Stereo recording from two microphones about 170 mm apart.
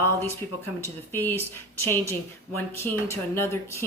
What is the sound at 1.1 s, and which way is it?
Speech, 10° left (ahead or behind).